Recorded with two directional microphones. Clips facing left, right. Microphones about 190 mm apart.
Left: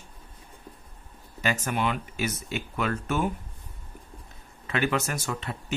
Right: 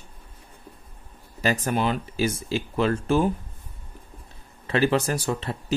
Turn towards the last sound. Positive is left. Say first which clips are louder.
# right 6 dB
turn(degrees=-35)  # may be behind; listen again after turning